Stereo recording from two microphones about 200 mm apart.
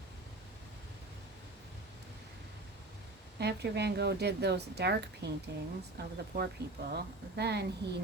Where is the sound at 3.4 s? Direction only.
55° right (ahead or behind).